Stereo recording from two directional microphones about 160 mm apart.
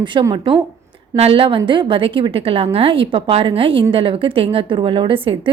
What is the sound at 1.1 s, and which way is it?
A woman's voice, 40° right (ahead or behind).